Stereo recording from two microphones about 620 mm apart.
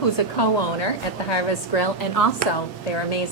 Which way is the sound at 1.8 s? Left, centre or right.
Left.